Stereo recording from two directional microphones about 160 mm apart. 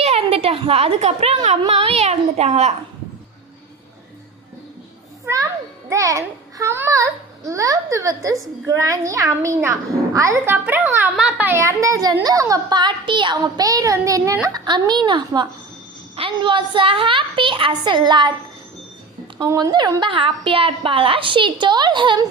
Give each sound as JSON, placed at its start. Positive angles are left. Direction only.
{"t": 0.0, "sound": "a woman's voice", "side_deg": -40}
{"t": 5.2, "sound": "a child's voice", "side_deg": -20}
{"t": 19.4, "sound": "a woman's voice", "side_deg": -20}